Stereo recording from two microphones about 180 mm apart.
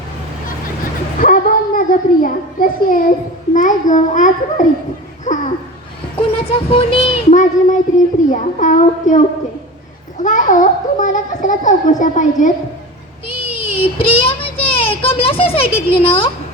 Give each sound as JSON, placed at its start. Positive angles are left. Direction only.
{"t": 1.2, "sound": "a child's voice", "side_deg": 50}
{"t": 6.4, "sound": "speech", "side_deg": 30}
{"t": 10.2, "sound": "a child's voice", "side_deg": 45}
{"t": 13.4, "sound": "speech", "side_deg": 30}